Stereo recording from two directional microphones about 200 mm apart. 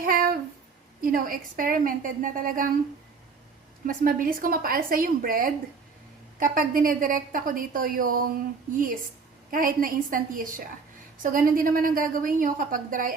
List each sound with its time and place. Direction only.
0.0 s a sound: 45° right (ahead or behind)
1.0 s a woman's voice: 45° right (ahead or behind)
3.8 s a woman's voice: 45° right (ahead or behind)
9.5 s a woman's voice: 45° right (ahead or behind)